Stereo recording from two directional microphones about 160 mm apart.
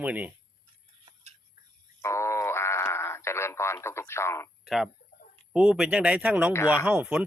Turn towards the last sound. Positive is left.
turn(degrees=-5)  # may be behind; listen again after turning